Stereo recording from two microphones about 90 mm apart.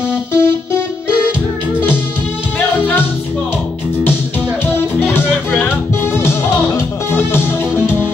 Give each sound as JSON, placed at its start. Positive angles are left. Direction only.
{"t": 0.3, "sound": "keyboard", "side_deg": 30}
{"t": 2.8, "sound": "music", "side_deg": 25}
{"t": 7.1, "sound": "music", "side_deg": 25}